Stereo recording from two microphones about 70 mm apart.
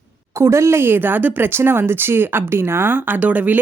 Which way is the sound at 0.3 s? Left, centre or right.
Right.